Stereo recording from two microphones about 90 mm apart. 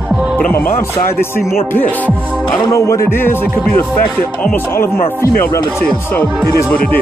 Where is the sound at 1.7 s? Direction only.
20° left (ahead or behind).